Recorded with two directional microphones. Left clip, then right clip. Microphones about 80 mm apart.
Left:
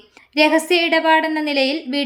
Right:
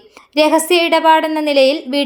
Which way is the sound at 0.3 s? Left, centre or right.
Right.